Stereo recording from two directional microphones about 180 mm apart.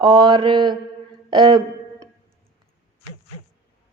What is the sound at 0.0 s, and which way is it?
Speech, 25° right (ahead or behind).